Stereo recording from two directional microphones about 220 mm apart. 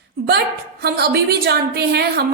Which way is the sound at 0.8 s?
45° right (ahead or behind).